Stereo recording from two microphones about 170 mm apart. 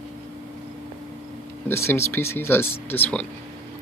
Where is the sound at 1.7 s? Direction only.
15° left (ahead or behind).